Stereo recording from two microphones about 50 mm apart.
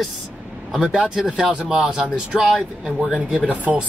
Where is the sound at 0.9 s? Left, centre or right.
Centre.